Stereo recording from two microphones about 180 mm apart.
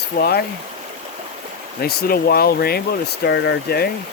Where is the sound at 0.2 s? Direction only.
60° left (ahead or behind).